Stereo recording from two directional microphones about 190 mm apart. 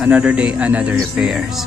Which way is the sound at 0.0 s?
5° right (ahead or behind).